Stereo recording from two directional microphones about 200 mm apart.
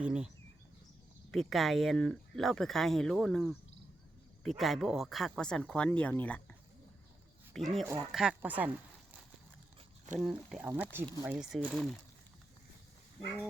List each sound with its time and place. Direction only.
0.0 s speech: 5° right (ahead or behind)
1.3 s speech: centre (ahead or behind)
10.2 s speech: centre (ahead or behind)